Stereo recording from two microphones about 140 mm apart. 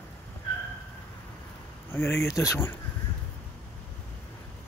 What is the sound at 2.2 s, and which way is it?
Speech, 20° left (ahead or behind).